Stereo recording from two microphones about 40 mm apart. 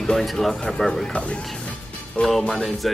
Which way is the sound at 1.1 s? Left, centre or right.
Left.